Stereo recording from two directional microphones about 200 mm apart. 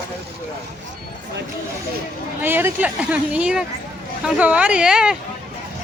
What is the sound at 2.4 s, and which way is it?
Speech, 10° right (ahead or behind).